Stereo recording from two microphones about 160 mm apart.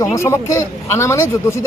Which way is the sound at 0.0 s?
20° left (ahead or behind).